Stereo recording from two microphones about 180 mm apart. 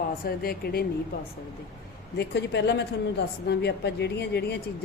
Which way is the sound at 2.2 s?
75° left (ahead or behind).